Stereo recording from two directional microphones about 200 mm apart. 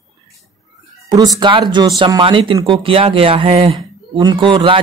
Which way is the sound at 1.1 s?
20° right (ahead or behind).